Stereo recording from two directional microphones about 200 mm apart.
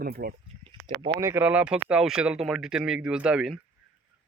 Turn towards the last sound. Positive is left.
turn(degrees=-5)  # may be behind; listen again after turning